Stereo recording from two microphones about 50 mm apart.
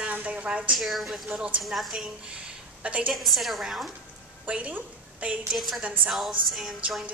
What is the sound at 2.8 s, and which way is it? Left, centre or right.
Speech, right.